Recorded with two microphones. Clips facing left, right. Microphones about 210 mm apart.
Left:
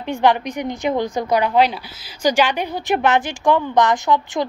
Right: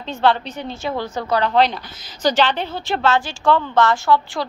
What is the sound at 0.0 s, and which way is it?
A woman's voice, 15° left (ahead or behind).